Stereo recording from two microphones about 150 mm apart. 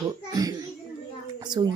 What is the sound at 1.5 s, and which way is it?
Speech, 30° right (ahead or behind).